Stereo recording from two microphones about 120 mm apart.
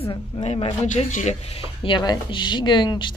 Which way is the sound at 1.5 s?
45° left (ahead or behind).